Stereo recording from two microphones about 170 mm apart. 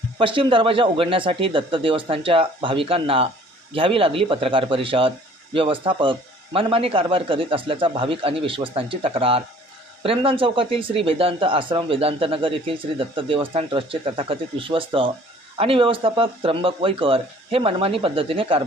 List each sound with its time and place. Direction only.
0.2 s speech: 30° right (ahead or behind)